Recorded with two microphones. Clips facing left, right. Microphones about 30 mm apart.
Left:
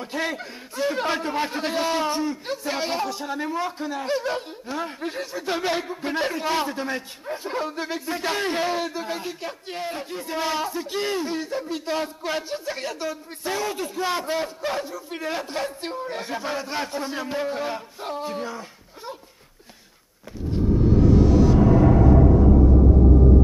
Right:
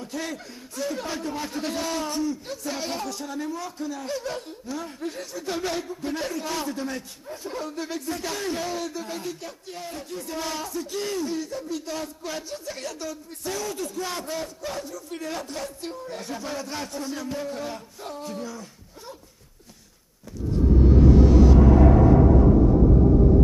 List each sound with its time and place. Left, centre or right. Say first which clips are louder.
0.0 s a man's voice: left 5 dB; left
21.0 s music: even; centre